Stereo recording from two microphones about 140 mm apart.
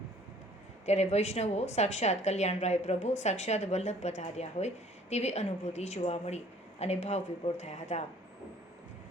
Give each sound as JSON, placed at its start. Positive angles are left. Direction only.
{"t": 0.9, "sound": "a woman's voice", "side_deg": 50}